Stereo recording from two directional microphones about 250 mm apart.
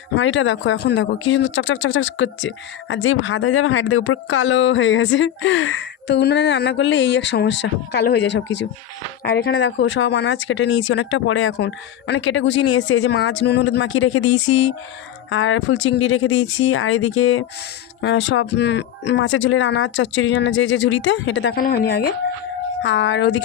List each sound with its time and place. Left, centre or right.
0.2 s speech: left